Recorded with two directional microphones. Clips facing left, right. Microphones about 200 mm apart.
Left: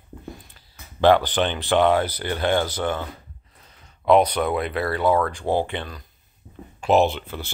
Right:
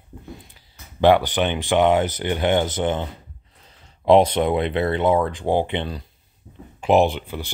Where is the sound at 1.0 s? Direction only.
15° right (ahead or behind).